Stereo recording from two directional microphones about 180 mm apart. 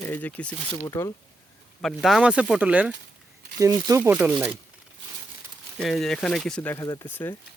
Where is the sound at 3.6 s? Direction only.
15° right (ahead or behind).